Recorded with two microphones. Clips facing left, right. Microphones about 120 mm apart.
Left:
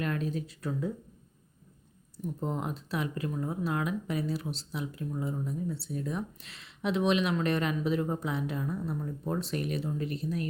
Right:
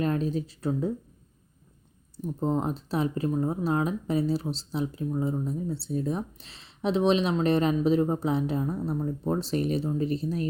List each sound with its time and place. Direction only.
0.0 s speech: 30° right (ahead or behind)
2.1 s speech: 30° right (ahead or behind)